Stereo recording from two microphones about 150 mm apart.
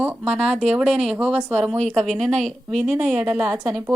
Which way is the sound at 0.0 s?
10° right (ahead or behind).